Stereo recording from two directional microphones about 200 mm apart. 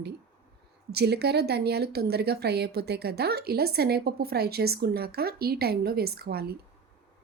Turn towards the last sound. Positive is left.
turn(degrees=-50)  # may be behind; listen again after turning